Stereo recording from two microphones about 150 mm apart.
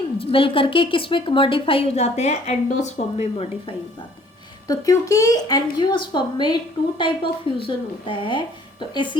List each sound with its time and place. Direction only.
0.2 s speech: 35° left (ahead or behind)
4.7 s speech: 20° left (ahead or behind)